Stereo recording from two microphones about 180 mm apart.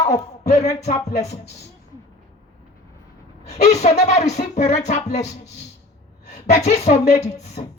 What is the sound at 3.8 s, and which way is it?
Speech, 45° left (ahead or behind).